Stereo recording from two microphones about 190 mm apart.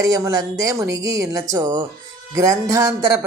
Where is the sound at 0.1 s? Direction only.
20° right (ahead or behind).